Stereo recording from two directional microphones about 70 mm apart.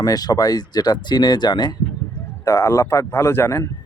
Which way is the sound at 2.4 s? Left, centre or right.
Left.